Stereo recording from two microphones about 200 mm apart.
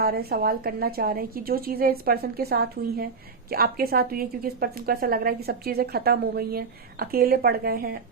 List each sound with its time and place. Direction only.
0.0 s a woman's voice: 50° right (ahead or behind)